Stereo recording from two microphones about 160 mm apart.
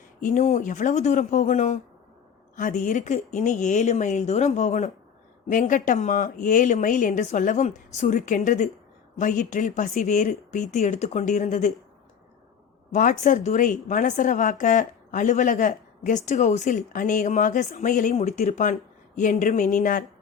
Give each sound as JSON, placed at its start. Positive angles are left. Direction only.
{"t": 0.2, "sound": "a woman's voice", "side_deg": 50}
{"t": 12.9, "sound": "a woman's voice", "side_deg": 55}